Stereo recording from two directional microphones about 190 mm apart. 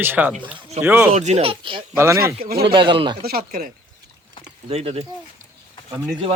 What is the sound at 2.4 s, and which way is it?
Speech, 55° right (ahead or behind).